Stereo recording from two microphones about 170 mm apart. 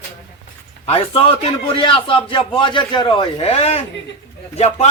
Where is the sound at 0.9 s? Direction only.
35° left (ahead or behind).